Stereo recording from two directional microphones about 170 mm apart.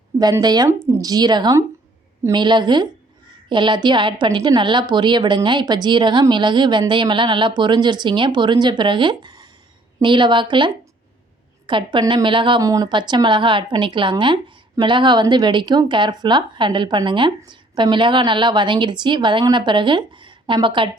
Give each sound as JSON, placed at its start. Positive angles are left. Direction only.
{"t": 0.2, "sound": "a woman's voice", "side_deg": -25}